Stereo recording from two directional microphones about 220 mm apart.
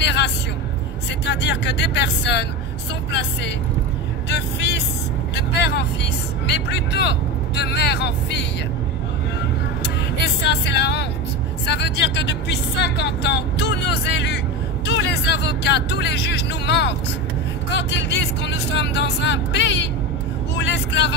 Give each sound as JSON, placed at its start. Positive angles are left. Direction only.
{"t": 0.0, "sound": "music", "side_deg": 50}
{"t": 1.2, "sound": "speech", "side_deg": 50}
{"t": 10.2, "sound": "speech", "side_deg": 50}